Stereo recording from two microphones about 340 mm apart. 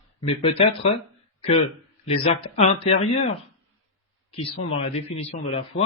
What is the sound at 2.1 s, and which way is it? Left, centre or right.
Speech, centre.